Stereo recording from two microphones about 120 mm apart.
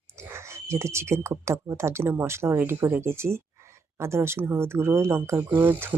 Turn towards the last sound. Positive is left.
turn(degrees=-20)  # may be behind; listen again after turning